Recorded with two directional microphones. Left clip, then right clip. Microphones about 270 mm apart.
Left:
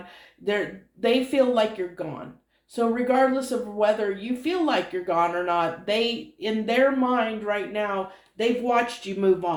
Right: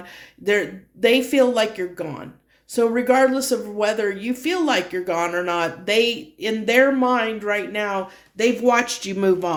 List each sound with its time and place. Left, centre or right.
0.0 s speech: right